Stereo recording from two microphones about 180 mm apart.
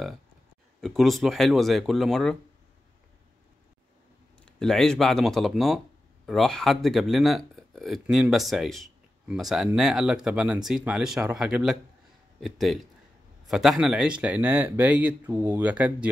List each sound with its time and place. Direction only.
0.7 s speech: centre (ahead or behind)
4.5 s speech: 5° left (ahead or behind)